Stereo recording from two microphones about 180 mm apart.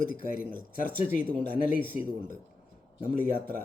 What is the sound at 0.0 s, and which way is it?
Speech, 50° left (ahead or behind).